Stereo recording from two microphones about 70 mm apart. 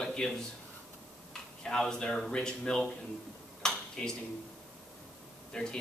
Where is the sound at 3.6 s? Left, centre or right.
Centre.